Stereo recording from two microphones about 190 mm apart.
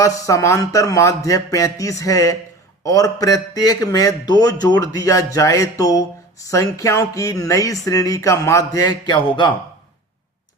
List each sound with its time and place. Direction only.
0.0 s a man's voice: 15° left (ahead or behind)